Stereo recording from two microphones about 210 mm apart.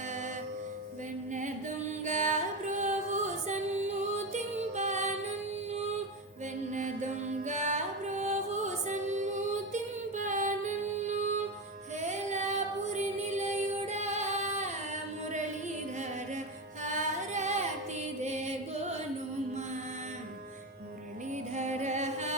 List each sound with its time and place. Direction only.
1.3 s music: 35° right (ahead or behind)
6.7 s music: 35° right (ahead or behind)
11.9 s female singing: 35° right (ahead or behind)
16.8 s music: 35° right (ahead or behind)
18.2 s chant: 30° right (ahead or behind)
21.5 s music: 35° right (ahead or behind)